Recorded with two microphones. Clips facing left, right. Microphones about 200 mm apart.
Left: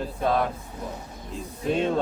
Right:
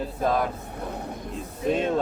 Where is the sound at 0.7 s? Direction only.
60° right (ahead or behind).